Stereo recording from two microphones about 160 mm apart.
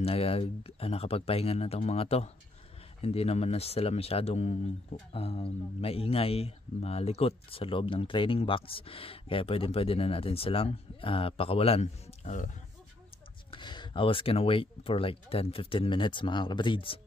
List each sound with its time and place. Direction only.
0.0 s speech: 40° left (ahead or behind)
13.5 s speech: 30° left (ahead or behind)